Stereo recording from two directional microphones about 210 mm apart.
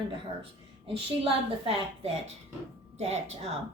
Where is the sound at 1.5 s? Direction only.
25° right (ahead or behind).